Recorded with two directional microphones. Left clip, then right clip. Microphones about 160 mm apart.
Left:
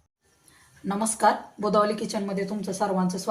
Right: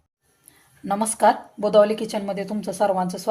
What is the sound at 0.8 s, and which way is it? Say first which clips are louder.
A woman's voice: right 4 dB; 90° right.